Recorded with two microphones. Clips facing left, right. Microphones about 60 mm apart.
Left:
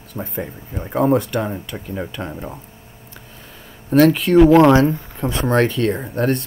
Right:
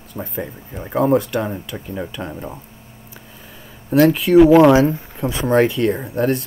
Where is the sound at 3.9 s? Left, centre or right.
Centre.